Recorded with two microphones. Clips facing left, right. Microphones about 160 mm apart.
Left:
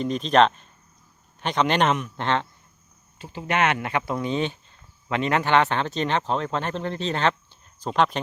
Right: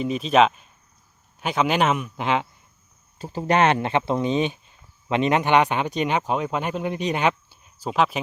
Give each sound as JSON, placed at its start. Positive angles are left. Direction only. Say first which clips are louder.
{"t": 0.0, "sound": "a man's voice", "louder": "right 1 dB", "side_deg": -5}
{"t": 3.2, "sound": "speech", "louder": "right 4 dB", "side_deg": -40}